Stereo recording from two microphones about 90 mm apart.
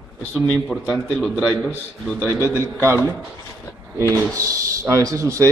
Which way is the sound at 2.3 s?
30° left (ahead or behind).